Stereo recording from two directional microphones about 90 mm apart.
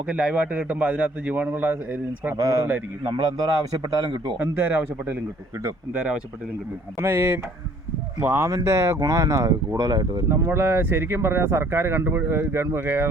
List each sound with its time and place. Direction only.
0.1 s a man's voice: 10° right (ahead or behind)
2.4 s speech: 40° right (ahead or behind)
3.7 s a man's voice: 45° right (ahead or behind)
4.4 s speech: 20° right (ahead or behind)
7.0 s speech: 20° right (ahead or behind); by 10.1 s 45° right (ahead or behind)
10.2 s speech: 30° right (ahead or behind)